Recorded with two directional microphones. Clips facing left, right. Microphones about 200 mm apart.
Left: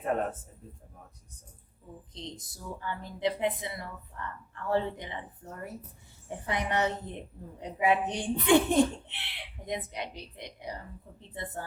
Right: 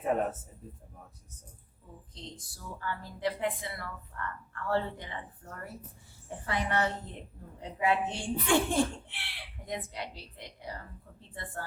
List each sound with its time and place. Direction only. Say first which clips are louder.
0.0 s a man's voice: right 1 dB; 5° right (ahead or behind)
2.1 s a woman's voice: left 4 dB; 20° left (ahead or behind)